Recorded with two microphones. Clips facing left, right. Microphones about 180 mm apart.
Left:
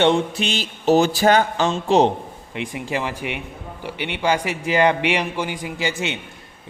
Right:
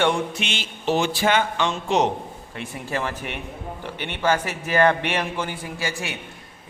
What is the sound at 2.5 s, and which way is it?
A man's voice, 15° left (ahead or behind).